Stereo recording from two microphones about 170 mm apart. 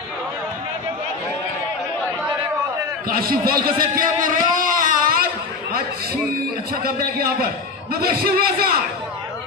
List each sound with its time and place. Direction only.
3.1 s a man's voice: 60° right (ahead or behind)
4.6 s a sound: 55° right (ahead or behind)
8.2 s a man's voice: 60° right (ahead or behind)